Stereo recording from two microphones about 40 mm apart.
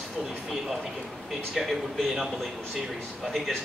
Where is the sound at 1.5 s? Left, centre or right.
Centre.